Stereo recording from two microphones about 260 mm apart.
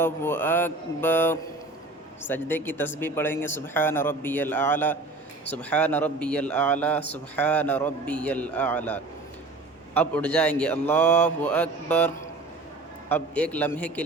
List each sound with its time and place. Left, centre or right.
0.0 s a man's voice: centre